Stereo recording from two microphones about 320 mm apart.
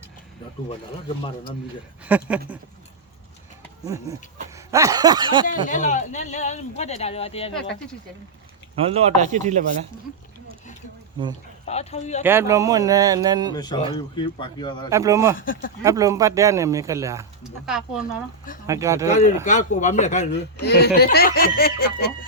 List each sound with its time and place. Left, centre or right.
1.0 s speech: centre
2.0 s speech: centre
3.8 s speech: centre
4.5 s a sound: centre
5.5 s speech: left
8.8 s speech: centre
11.6 s speech: centre
12.2 s speech: centre
13.5 s speech: centre
14.8 s speech: centre
15.4 s speech: left
15.8 s speech: centre
19.5 s speech: left